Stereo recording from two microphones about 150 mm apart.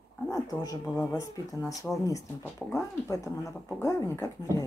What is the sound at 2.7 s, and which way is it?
Speech, 20° left (ahead or behind).